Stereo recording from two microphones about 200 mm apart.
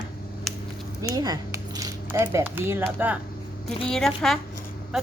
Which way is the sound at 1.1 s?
20° right (ahead or behind).